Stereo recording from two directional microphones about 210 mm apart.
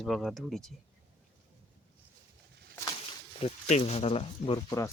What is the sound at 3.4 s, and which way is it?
Speech, 30° left (ahead or behind).